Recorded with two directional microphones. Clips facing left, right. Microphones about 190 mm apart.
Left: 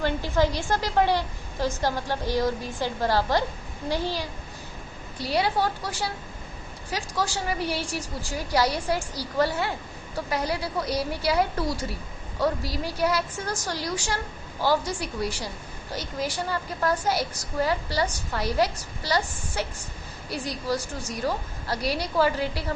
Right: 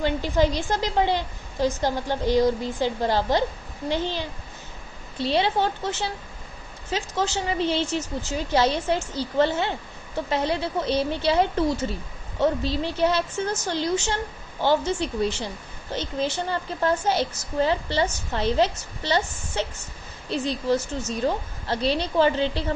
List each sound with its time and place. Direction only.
0.0 s a woman's voice: 20° right (ahead or behind)
5.1 s a woman's voice: 25° right (ahead or behind)